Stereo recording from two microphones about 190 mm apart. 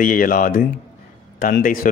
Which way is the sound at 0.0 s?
45° left (ahead or behind).